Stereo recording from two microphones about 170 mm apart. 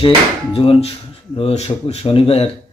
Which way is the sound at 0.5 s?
35° left (ahead or behind).